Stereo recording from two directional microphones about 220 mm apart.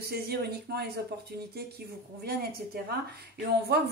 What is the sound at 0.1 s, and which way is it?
Speech, 45° right (ahead or behind).